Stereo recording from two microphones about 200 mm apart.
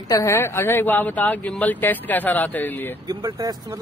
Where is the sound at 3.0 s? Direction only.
20° right (ahead or behind).